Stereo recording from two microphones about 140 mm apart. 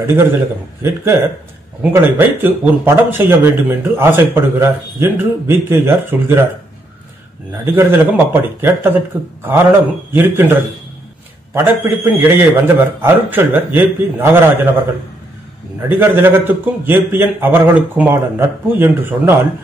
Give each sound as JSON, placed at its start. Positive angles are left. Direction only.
{"t": 0.0, "sound": "speech", "side_deg": -20}
{"t": 1.8, "sound": "speech", "side_deg": -15}
{"t": 7.6, "sound": "speech", "side_deg": -15}
{"t": 16.0, "sound": "speech", "side_deg": -15}